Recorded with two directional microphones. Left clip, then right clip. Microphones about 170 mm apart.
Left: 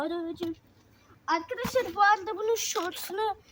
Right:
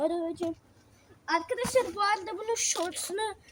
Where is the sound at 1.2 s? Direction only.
35° left (ahead or behind).